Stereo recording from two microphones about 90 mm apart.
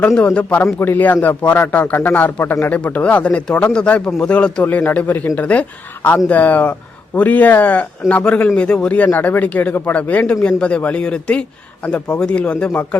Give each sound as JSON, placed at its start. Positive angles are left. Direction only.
{"t": 0.1, "sound": "speech", "side_deg": 10}
{"t": 4.6, "sound": "speech", "side_deg": 25}